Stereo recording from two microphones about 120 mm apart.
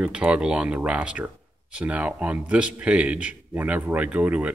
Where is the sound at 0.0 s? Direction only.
10° right (ahead or behind).